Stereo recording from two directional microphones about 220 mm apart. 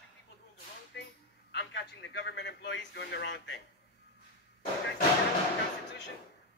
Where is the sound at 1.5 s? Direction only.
50° left (ahead or behind).